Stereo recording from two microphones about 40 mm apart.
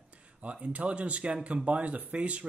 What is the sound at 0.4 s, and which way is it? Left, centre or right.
Speech, right.